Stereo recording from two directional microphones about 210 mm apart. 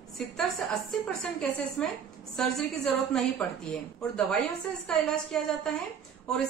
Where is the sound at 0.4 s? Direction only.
Centre (ahead or behind).